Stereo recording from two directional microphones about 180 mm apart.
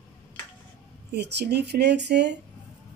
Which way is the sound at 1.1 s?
70° right (ahead or behind).